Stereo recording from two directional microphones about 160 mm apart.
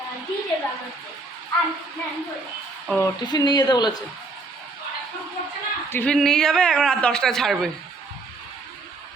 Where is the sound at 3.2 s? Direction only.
25° left (ahead or behind).